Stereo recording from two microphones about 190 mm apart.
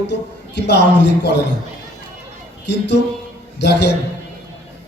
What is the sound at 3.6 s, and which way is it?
Speech, 65° left (ahead or behind).